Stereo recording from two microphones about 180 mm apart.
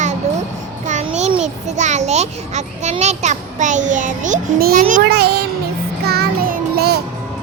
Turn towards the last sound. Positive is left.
turn(degrees=-65)  # may be behind; listen again after turning